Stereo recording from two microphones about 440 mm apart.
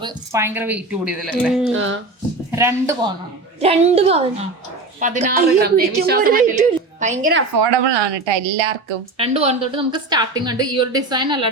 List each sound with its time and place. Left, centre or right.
0.0 s a woman's voice: centre
1.7 s a woman's voice: right
2.5 s a woman's voice: centre
7.6 s a woman's voice: right
9.1 s speech: centre